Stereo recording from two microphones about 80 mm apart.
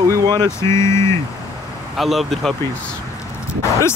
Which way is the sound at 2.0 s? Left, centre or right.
Centre.